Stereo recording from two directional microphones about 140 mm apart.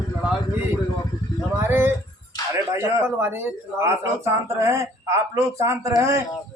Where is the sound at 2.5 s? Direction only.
20° right (ahead or behind).